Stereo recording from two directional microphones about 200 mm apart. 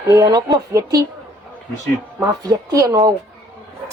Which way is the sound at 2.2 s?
15° right (ahead or behind).